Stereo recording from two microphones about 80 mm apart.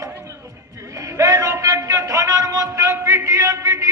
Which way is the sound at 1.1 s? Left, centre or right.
Right.